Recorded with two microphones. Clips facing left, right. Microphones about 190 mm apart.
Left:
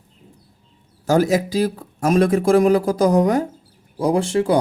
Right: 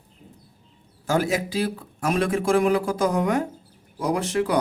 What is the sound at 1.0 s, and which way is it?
Speech, 40° left (ahead or behind).